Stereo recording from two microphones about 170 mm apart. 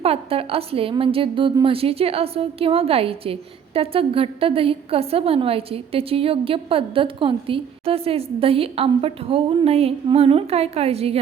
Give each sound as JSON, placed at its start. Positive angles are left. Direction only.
{"t": 0.0, "sound": "a woman's voice", "side_deg": -35}